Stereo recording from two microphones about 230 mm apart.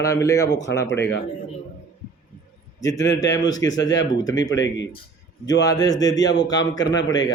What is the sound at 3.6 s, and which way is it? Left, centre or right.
Speech, centre.